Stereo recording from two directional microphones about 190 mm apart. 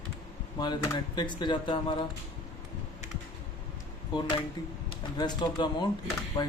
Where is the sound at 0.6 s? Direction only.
25° left (ahead or behind).